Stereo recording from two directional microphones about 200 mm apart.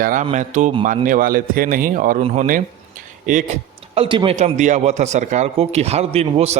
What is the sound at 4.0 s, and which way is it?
A man's voice, 25° right (ahead or behind).